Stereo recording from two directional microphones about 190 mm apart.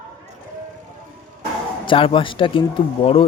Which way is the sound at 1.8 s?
25° left (ahead or behind).